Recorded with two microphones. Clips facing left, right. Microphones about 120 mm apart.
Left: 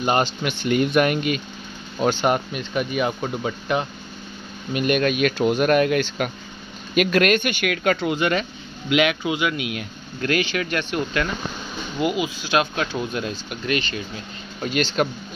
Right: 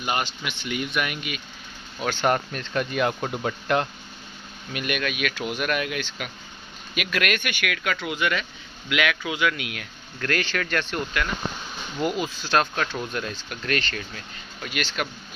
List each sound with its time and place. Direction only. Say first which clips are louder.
0.0 s speech: left 7 dB; 35° left (ahead or behind)
0.4 s speech: left 9 dB; 45° left (ahead or behind)
2.0 s speech: left 3 dB; 15° left (ahead or behind)
4.7 s speech: left 8 dB; 35° left (ahead or behind); by 11.0 s 5° left (ahead or behind)
12.0 s speech: left 3 dB; 5° left (ahead or behind)
12.9 s speech: left 4 dB; 20° left (ahead or behind)
14.6 s speech: left 8 dB; 30° left (ahead or behind)